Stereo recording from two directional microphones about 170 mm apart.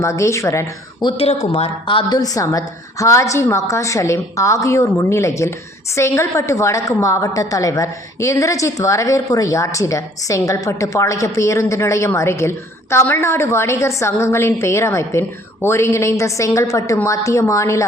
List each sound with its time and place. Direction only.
0.0 s a woman's voice: 15° left (ahead or behind)
1.0 s a woman's voice: 35° left (ahead or behind); by 17.8 s 15° left (ahead or behind)